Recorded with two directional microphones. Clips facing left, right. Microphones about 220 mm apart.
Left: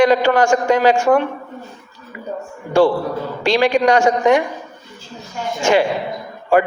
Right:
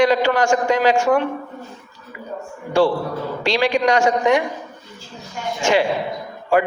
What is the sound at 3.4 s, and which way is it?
Speech, 50° left (ahead or behind).